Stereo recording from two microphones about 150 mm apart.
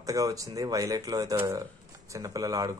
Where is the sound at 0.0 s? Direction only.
25° right (ahead or behind).